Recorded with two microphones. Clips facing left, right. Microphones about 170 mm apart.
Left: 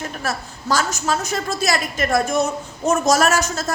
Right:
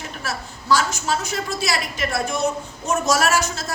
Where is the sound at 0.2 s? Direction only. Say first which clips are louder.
Left 4 dB; 45° left (ahead or behind).